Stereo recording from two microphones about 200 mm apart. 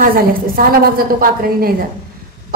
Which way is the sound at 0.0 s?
45° right (ahead or behind).